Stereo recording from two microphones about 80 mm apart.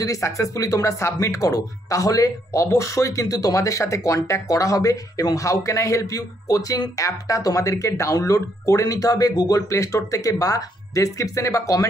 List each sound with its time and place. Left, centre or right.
0.0 s speech: left
9.7 s speech: left